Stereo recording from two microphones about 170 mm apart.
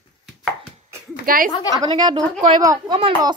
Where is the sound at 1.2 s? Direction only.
55° right (ahead or behind).